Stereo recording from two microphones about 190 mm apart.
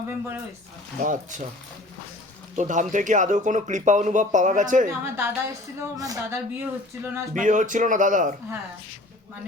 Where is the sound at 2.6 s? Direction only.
40° right (ahead or behind).